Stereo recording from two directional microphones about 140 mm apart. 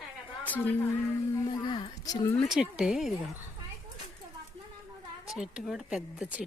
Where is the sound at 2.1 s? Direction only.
25° left (ahead or behind).